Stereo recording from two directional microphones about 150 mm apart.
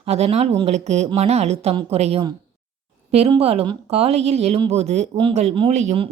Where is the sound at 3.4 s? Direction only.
40° right (ahead or behind).